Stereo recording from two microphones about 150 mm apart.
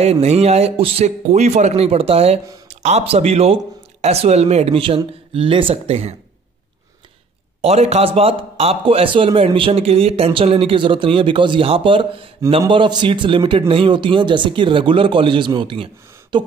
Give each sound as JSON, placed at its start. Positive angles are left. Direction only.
{"t": 0.0, "sound": "a man's voice", "side_deg": -45}
{"t": 7.6, "sound": "a man's voice", "side_deg": -45}